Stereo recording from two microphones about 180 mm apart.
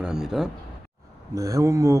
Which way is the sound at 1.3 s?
15° right (ahead or behind).